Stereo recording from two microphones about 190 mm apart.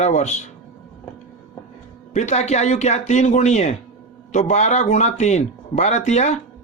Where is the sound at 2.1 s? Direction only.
35° left (ahead or behind).